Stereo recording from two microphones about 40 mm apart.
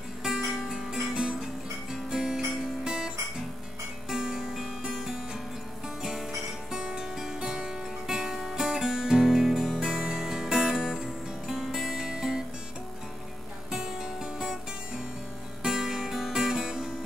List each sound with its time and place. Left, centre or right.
0.2 s music: centre
6.7 s music: centre
13.7 s music: centre